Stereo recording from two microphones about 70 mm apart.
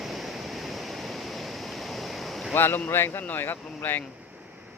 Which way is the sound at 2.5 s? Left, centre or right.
Left.